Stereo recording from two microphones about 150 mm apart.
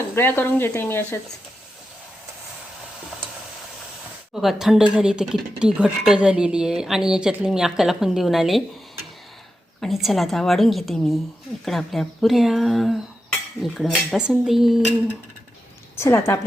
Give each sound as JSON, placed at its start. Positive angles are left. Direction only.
{"t": 0.2, "sound": "speech", "side_deg": 15}
{"t": 4.4, "sound": "speech", "side_deg": 0}
{"t": 9.8, "sound": "speech", "side_deg": 0}
{"t": 16.0, "sound": "speech", "side_deg": 15}